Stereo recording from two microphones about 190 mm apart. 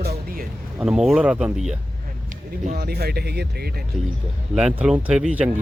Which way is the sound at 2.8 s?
55° right (ahead or behind).